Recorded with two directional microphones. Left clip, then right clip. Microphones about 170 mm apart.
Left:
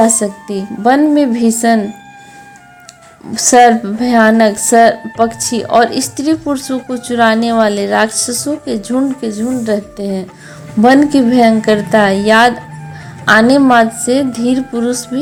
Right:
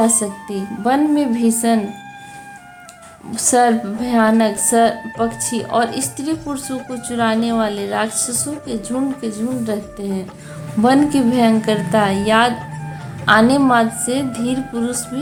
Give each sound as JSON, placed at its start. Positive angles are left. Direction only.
{"t": 0.2, "sound": "a woman's voice", "side_deg": 30}
{"t": 3.3, "sound": "a woman's voice", "side_deg": 30}